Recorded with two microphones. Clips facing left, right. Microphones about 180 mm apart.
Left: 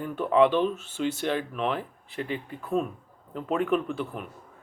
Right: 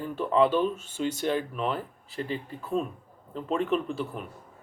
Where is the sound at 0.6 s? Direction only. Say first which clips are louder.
Left 1 dB; 45° right (ahead or behind).